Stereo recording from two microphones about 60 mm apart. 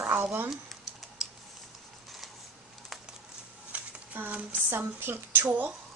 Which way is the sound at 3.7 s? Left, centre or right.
Right.